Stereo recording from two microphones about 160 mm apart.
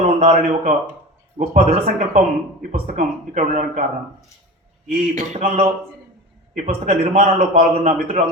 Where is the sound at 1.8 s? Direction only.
55° right (ahead or behind).